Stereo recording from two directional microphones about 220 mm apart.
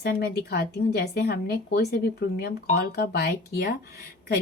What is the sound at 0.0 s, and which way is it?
Speech, 45° left (ahead or behind).